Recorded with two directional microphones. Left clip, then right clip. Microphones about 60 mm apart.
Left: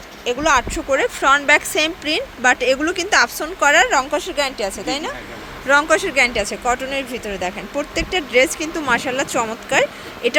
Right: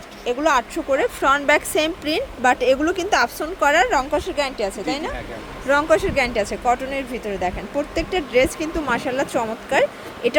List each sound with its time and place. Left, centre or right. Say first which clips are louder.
0.3 s speech: left 2 dB; centre
1.2 s a woman's voice: left 4 dB; right
2.1 s speech: left 2 dB; centre